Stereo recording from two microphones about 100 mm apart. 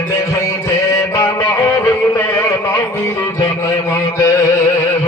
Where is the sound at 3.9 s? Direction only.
30° left (ahead or behind).